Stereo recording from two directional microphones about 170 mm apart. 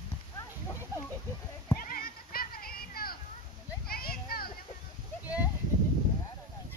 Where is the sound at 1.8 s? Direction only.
60° left (ahead or behind).